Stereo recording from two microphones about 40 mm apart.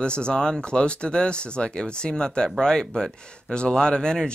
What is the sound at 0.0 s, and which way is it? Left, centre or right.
Speech, left.